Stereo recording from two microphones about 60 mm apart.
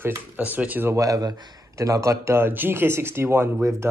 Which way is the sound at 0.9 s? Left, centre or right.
Right.